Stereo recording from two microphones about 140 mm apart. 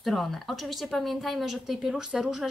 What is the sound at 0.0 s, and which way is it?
Speech, centre (ahead or behind).